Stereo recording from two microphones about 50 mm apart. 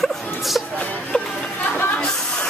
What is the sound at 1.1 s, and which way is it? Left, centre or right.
Music, left.